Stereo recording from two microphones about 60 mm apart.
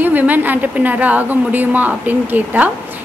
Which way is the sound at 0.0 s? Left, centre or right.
Right.